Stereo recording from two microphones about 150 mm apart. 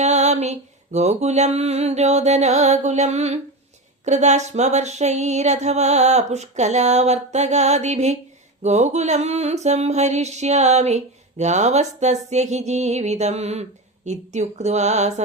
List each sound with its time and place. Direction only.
0.0 s mantra: 50° right (ahead or behind)